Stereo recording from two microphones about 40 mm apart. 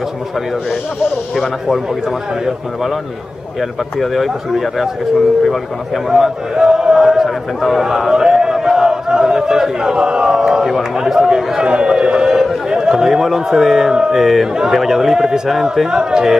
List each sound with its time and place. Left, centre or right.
4.0 s speech: centre
6.0 s a man's voice: centre
14.2 s a man's voice: centre